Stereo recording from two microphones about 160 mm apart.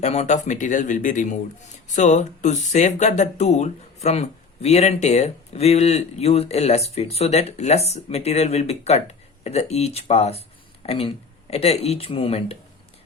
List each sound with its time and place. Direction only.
0.0 s speech: 45° left (ahead or behind)